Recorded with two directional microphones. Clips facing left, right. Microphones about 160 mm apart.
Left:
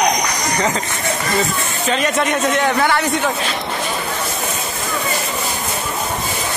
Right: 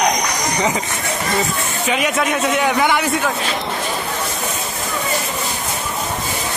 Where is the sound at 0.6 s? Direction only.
15° right (ahead or behind).